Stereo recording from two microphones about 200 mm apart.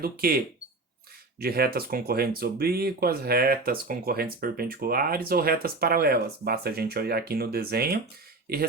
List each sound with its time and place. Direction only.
0.0 s speech: 50° right (ahead or behind)